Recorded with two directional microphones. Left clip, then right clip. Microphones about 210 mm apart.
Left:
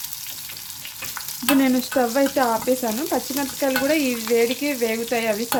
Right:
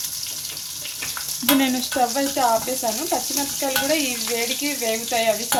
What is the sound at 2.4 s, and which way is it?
Speech, 45° left (ahead or behind).